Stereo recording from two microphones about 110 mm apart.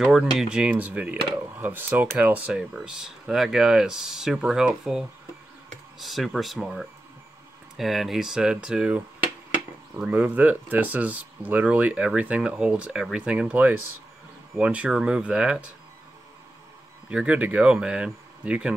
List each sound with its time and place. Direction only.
0.0 s speech: 5° right (ahead or behind)
17.1 s speech: 10° right (ahead or behind)